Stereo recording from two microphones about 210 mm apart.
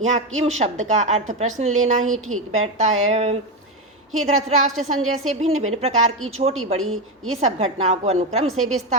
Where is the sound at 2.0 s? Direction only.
80° right.